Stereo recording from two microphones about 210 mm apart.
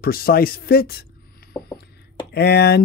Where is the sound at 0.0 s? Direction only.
45° left (ahead or behind).